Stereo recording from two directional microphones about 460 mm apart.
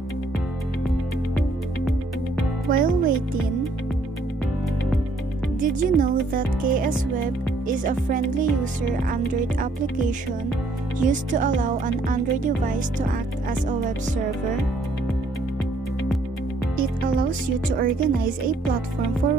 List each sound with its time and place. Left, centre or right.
2.7 s a child's voice: centre
5.6 s speech: centre
17.2 s speech: centre